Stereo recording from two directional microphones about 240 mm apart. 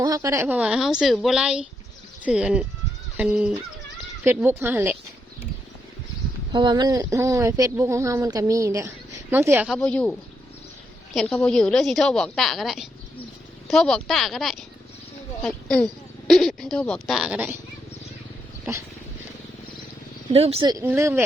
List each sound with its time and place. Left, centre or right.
0.0 s a woman's voice: centre
6.5 s a woman's voice: centre
20.3 s speech: right